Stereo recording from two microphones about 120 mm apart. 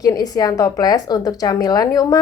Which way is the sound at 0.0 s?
30° left (ahead or behind).